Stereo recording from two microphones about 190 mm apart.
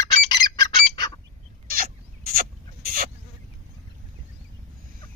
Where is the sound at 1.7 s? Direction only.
50° right (ahead or behind).